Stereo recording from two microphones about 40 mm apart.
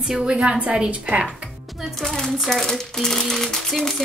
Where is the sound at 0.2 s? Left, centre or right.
Right.